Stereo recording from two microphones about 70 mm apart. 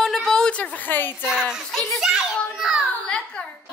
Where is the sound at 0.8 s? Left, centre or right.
Left.